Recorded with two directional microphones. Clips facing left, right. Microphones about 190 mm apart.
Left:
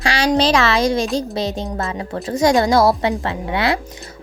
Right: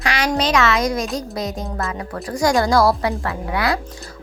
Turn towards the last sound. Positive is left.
turn(degrees=25)  # may be behind; listen again after turning